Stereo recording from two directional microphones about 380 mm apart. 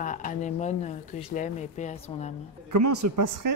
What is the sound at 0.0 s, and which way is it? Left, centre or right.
Speech, centre.